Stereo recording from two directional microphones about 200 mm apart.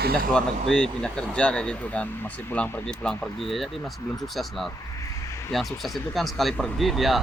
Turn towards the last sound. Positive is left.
turn(degrees=0)  # may be behind; listen again after turning